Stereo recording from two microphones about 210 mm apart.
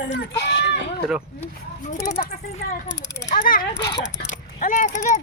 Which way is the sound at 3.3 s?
40° left (ahead or behind).